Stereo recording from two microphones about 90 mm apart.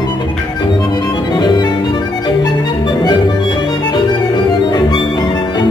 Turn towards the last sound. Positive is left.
turn(degrees=55)  # may be behind; listen again after turning